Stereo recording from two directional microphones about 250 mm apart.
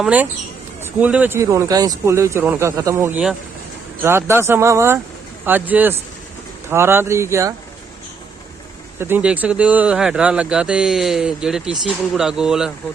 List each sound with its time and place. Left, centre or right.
0.0 s speech: centre
9.0 s speech: centre